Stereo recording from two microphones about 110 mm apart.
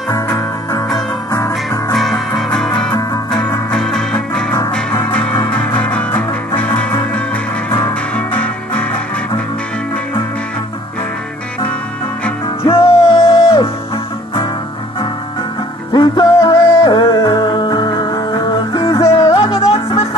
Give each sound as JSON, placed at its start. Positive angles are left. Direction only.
{"t": 0.1, "sound": "music", "side_deg": 35}
{"t": 2.0, "sound": "music", "side_deg": 0}
{"t": 5.7, "sound": "music", "side_deg": 10}
{"t": 8.2, "sound": "music", "side_deg": 15}
{"t": 12.6, "sound": "music", "side_deg": 55}
{"t": 15.9, "sound": "music", "side_deg": 45}
{"t": 16.3, "sound": "music", "side_deg": 35}
{"t": 19.4, "sound": "music", "side_deg": 60}